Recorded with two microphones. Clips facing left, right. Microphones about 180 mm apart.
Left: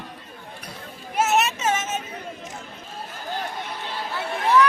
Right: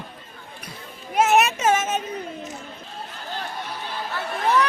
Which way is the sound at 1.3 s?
55° right (ahead or behind).